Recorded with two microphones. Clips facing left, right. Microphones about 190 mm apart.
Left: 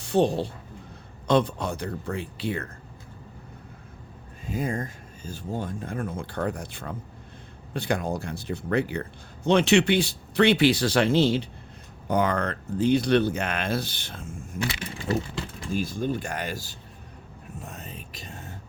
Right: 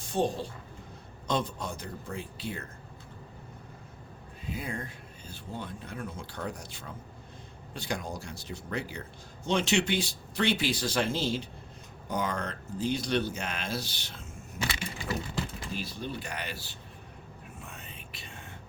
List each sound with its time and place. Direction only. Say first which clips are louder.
0.0 s speech: left 7 dB; 70° left (ahead or behind)
4.4 s speech: left 8 dB; 45° left (ahead or behind)
15.7 s speech: left 11 dB; 50° left (ahead or behind)
17.6 s music: left 9 dB; 40° left (ahead or behind)